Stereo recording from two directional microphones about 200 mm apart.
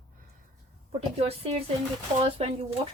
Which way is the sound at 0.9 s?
30° right (ahead or behind).